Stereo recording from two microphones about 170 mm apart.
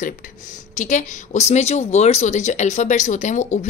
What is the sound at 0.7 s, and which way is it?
Speech, 45° left (ahead or behind).